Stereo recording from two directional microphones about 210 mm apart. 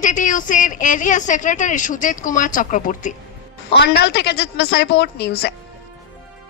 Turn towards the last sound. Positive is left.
turn(degrees=50)  # may be behind; listen again after turning